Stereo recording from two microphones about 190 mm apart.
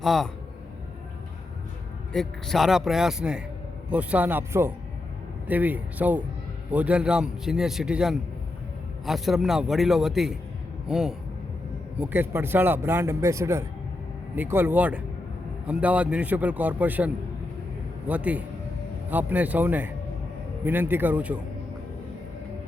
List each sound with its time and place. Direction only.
0.0 s a man's voice: centre (ahead or behind)
2.1 s a man's voice: centre (ahead or behind)
18.1 s speech: 10° right (ahead or behind)